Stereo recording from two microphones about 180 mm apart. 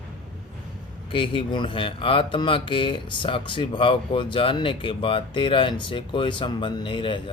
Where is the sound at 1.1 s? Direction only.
30° left (ahead or behind).